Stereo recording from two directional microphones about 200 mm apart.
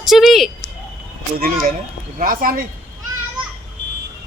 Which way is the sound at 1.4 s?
45° right (ahead or behind).